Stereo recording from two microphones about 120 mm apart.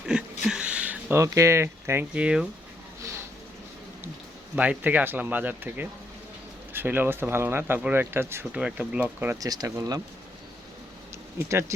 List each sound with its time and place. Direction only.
0.0 s a sound: 5° right (ahead or behind)
1.1 s speech: 25° right (ahead or behind)
2.1 s speech: 10° right (ahead or behind)
4.5 s speech: 10° right (ahead or behind)
9.4 s speech: 30° right (ahead or behind)
11.3 s speech: 20° right (ahead or behind)